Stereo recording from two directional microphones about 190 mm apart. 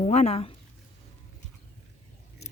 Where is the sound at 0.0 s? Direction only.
35° left (ahead or behind).